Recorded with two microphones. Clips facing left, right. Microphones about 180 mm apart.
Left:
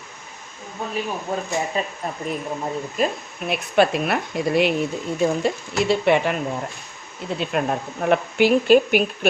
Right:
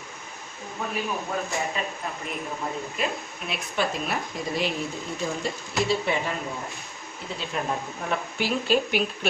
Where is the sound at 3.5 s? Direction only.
65° left (ahead or behind).